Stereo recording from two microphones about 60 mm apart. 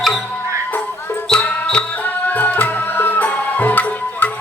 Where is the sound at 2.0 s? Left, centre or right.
Left.